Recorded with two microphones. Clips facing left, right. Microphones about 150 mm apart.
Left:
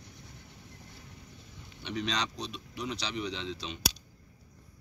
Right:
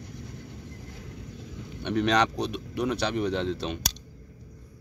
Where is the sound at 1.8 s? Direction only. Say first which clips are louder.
Right 10 dB; 55° right (ahead or behind).